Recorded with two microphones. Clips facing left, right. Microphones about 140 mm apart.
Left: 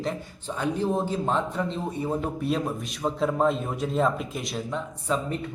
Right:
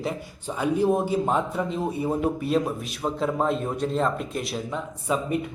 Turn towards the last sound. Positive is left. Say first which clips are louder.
# right 2 dB
turn(degrees=-5)  # may be behind; listen again after turning